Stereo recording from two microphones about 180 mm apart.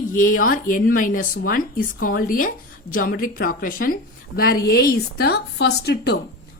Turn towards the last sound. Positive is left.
turn(degrees=65)  # may be behind; listen again after turning